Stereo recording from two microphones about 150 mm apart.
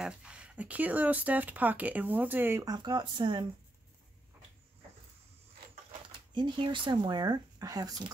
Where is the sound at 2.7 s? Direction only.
30° right (ahead or behind).